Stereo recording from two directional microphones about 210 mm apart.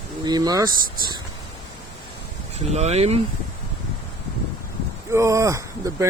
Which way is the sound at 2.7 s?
30° right (ahead or behind).